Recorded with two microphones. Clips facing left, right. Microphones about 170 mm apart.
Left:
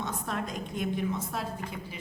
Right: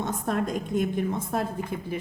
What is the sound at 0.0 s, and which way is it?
A woman's voice, 50° right (ahead or behind).